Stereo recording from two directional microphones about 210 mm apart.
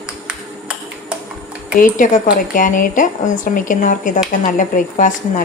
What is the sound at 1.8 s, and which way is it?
A woman's voice, 40° left (ahead or behind).